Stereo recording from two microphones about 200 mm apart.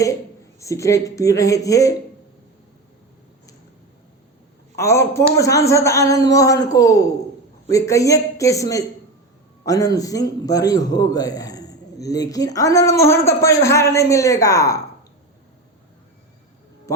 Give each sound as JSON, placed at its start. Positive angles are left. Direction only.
{"t": 0.6, "sound": "a man's voice", "side_deg": 15}
{"t": 4.8, "sound": "a man's voice", "side_deg": 15}